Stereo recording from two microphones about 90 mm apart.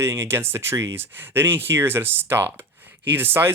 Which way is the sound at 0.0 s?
30° right (ahead or behind).